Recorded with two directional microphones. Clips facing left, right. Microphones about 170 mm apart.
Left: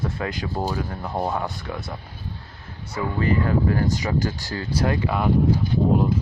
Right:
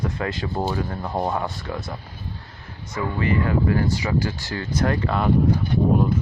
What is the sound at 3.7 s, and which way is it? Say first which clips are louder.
Speech: right 1 dB; 40° left (ahead or behind).